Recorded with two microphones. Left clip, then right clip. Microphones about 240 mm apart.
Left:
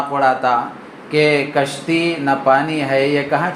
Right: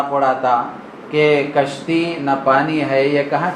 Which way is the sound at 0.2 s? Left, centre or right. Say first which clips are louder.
Left 2 dB; left.